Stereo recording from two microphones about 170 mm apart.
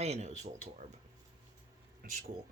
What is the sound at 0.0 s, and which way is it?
Speech, 40° right (ahead or behind).